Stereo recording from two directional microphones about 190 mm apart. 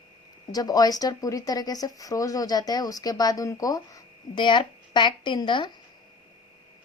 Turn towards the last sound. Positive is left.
turn(degrees=25)  # may be behind; listen again after turning